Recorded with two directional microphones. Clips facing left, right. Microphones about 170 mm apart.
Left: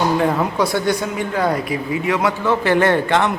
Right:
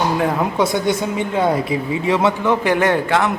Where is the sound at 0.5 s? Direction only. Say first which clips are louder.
Right 1 dB; 20° right (ahead or behind).